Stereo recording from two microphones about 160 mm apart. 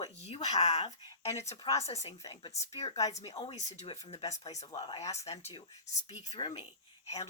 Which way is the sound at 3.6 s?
40° left (ahead or behind).